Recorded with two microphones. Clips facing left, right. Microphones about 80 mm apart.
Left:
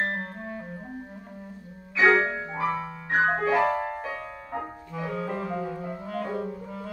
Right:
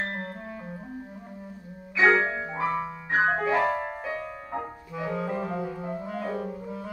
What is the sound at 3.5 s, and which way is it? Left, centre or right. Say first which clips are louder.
Music: left 1 dB; centre.